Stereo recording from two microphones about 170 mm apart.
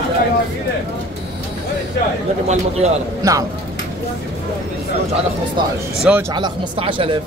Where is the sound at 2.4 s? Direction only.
40° right (ahead or behind).